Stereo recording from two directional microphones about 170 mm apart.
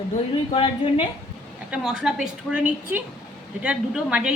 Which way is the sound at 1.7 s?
5° right (ahead or behind).